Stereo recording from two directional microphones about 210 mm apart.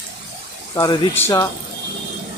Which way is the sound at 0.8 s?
15° left (ahead or behind).